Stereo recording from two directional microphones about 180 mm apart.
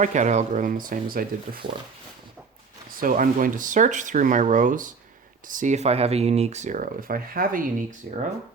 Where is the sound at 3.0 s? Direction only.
50° right (ahead or behind).